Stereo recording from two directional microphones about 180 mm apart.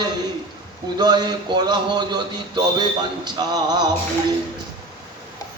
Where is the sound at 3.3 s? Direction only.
20° right (ahead or behind).